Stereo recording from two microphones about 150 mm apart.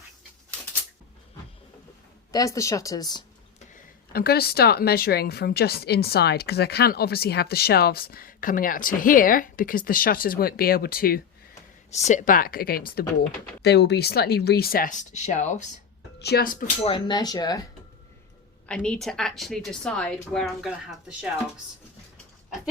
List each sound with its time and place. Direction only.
2.3 s speech: 20° left (ahead or behind)
4.1 s speech: 90° left
11.9 s speech: 50° left (ahead or behind)
16.2 s speech: 80° left
16.8 s speech: 30° left (ahead or behind)
18.7 s a woman's voice: 5° left (ahead or behind)